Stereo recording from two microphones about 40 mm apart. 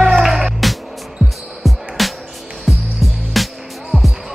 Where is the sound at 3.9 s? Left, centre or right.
Right.